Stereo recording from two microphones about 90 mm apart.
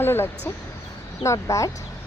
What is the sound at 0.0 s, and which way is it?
Speech, 25° left (ahead or behind).